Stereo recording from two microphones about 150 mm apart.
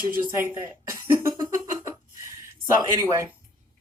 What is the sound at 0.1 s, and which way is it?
A woman's voice, 15° right (ahead or behind).